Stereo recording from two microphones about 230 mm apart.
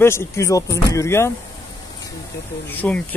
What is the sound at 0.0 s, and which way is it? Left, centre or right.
Speech, centre.